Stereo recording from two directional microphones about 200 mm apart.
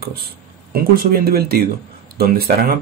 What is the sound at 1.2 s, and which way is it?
Speech, 50° right (ahead or behind).